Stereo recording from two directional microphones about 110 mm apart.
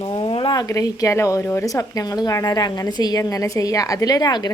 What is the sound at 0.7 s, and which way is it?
A woman's voice, 30° left (ahead or behind).